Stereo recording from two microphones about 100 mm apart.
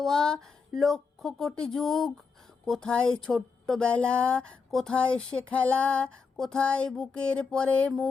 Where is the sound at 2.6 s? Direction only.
5° left (ahead or behind).